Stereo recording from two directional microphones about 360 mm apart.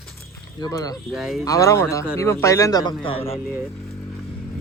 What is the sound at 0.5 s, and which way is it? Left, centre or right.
Speech, centre.